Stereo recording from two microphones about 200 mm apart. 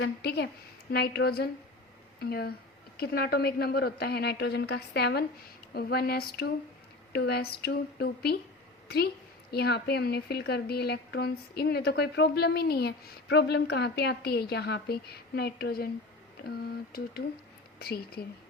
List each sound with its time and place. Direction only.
0.0 s speech: 55° left (ahead or behind)
9.5 s speech: 55° left (ahead or behind)